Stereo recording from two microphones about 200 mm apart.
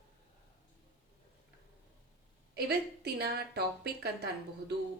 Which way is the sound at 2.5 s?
55° right (ahead or behind).